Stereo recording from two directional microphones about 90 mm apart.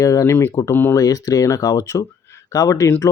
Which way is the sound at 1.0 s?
40° left (ahead or behind).